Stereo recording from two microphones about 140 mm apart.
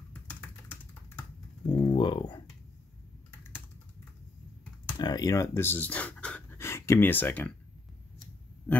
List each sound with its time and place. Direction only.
0.1 s typing: 10° left (ahead or behind)
1.7 s speech: 30° left (ahead or behind)
3.3 s typing: 15° left (ahead or behind)
4.9 s speech: 30° left (ahead or behind); by 7.5 s 15° left (ahead or behind)